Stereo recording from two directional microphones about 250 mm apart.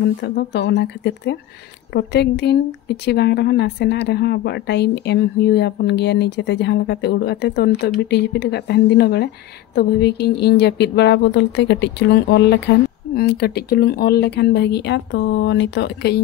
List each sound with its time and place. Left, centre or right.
0.2 s speech: left